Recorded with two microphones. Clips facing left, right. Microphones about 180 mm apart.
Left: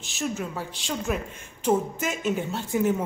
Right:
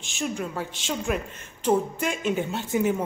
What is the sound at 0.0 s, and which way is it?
Speech, centre (ahead or behind).